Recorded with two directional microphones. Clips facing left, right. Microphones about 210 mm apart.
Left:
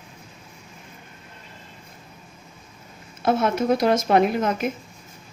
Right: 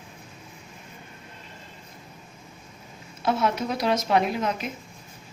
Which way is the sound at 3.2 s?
50° left (ahead or behind).